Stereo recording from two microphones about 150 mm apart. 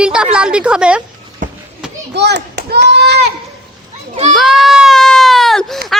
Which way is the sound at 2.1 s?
90° right.